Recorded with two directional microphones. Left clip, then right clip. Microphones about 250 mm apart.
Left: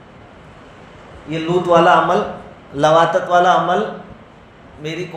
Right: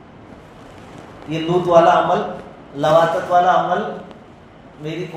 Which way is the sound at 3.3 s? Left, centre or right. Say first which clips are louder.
Left 1 dB; left.